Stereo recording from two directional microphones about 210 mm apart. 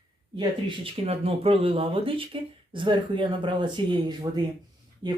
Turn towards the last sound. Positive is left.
turn(degrees=-20)  # may be behind; listen again after turning